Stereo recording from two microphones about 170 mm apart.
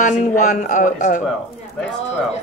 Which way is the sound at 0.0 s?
45° left (ahead or behind).